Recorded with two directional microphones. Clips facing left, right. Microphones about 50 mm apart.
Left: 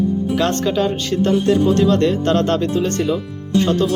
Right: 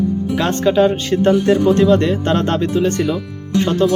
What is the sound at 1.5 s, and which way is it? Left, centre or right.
Speech, right.